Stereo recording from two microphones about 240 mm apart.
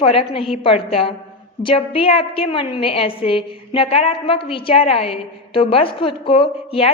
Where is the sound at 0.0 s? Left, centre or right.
Left.